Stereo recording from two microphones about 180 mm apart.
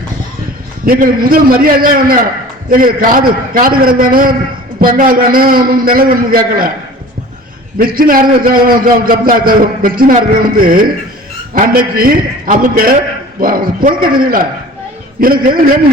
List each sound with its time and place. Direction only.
0.9 s a man's voice: 55° right (ahead or behind)
7.8 s a man's voice: 55° right (ahead or behind)